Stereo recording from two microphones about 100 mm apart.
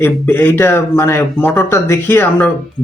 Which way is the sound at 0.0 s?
20° left (ahead or behind).